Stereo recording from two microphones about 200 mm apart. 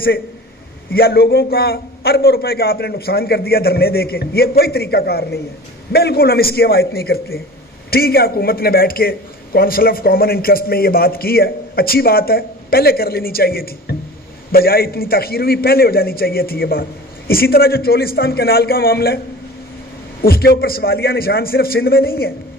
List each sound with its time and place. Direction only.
0.9 s a man's voice: 50° left (ahead or behind)
20.2 s a man's voice: 50° left (ahead or behind)